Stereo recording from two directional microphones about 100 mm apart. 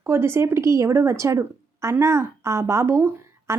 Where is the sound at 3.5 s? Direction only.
30° right (ahead or behind).